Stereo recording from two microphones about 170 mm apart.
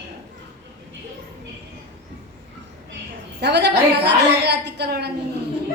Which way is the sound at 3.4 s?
80° right.